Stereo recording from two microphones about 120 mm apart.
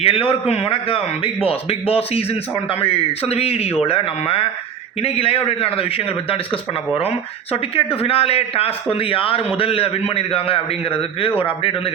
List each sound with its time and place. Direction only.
0.0 s a man's voice: 55° left (ahead or behind)